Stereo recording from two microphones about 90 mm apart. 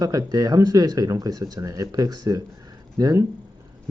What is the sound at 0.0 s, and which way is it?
Speech, 45° right (ahead or behind).